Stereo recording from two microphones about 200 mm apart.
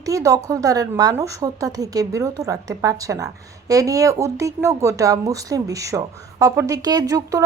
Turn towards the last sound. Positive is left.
turn(degrees=-20)  # may be behind; listen again after turning